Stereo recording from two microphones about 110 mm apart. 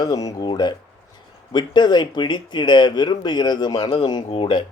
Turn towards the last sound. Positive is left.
turn(degrees=60)  # may be behind; listen again after turning